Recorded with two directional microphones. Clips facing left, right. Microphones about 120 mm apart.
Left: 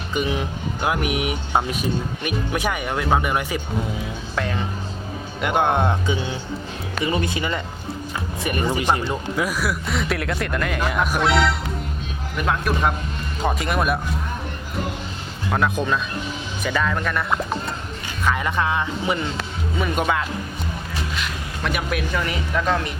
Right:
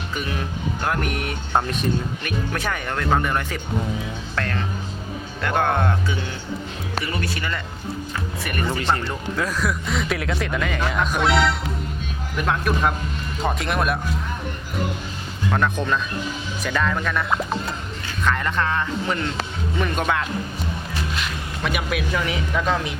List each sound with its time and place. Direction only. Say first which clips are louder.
0.1 s speech: left 6 dB; 20° left (ahead or behind); by 14.0 s centre (ahead or behind)
15.4 s speech: left 1 dB; 5° left (ahead or behind)
21.6 s speech: even; centre (ahead or behind)